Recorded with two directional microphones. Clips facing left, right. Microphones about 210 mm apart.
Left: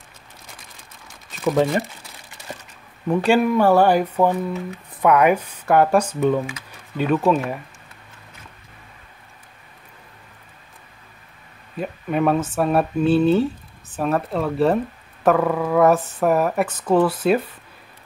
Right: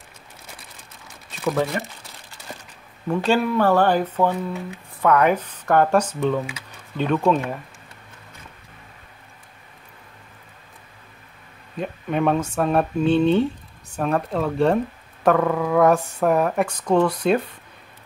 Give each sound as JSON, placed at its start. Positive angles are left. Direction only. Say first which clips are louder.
{"t": 1.5, "sound": "speech", "louder": "left 4 dB", "side_deg": 15}
{"t": 3.1, "sound": "speech", "louder": "left 3 dB", "side_deg": 15}
{"t": 11.8, "sound": "speech", "louder": "left 1 dB", "side_deg": 5}